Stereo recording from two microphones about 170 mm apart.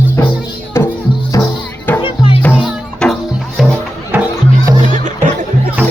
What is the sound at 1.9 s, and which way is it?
Music, 30° left (ahead or behind).